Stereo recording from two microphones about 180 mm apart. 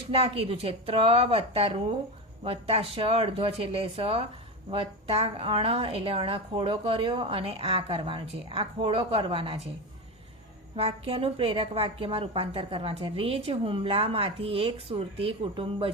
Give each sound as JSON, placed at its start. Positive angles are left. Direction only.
{"t": 0.1, "sound": "a woman's voice", "side_deg": -30}
{"t": 10.8, "sound": "a woman's voice", "side_deg": -30}